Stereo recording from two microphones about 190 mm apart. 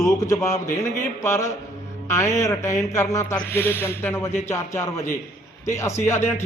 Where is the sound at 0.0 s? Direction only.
15° left (ahead or behind).